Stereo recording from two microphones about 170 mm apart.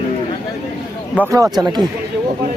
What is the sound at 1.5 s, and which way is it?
Speech, 25° right (ahead or behind).